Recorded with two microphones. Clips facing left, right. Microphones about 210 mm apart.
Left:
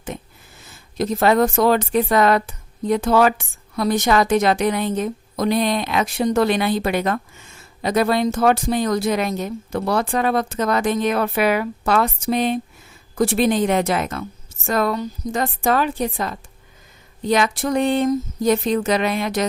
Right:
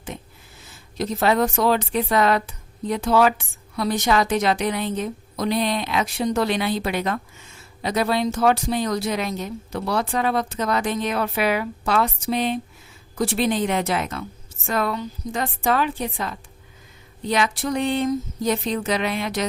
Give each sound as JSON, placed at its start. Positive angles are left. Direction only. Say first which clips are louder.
{"t": 0.9, "sound": "speech", "louder": "left 4 dB", "side_deg": 50}